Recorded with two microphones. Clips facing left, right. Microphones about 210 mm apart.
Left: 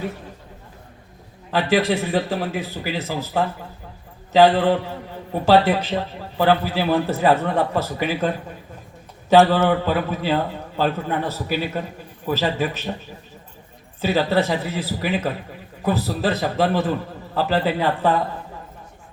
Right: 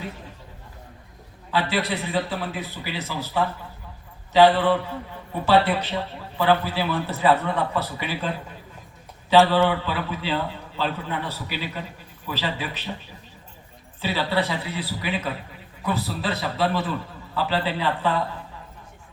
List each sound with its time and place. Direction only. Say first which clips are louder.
1.9 s a man's voice: left 5 dB; 50° left (ahead or behind)
9.5 s a man's voice: left 3 dB; 45° left (ahead or behind)
14.0 s a man's voice: left 5 dB; 45° left (ahead or behind)